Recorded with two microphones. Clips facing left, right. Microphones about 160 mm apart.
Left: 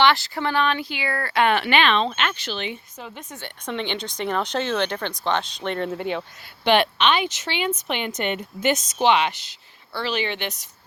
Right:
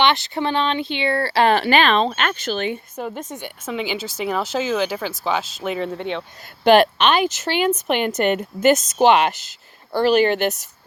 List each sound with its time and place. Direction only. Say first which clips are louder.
0.0 s speech: right 1 dB; 20° right (ahead or behind); by 3.2 s 50° right (ahead or behind)
3.2 s speech: right 5 dB; 15° right (ahead or behind)
3.7 s speech: right 2 dB; 5° right (ahead or behind)
6.7 s speech: right 5 dB; 45° right (ahead or behind)